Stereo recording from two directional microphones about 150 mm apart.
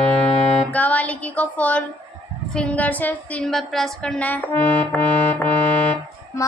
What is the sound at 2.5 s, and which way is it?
A woman's voice, 10° left (ahead or behind).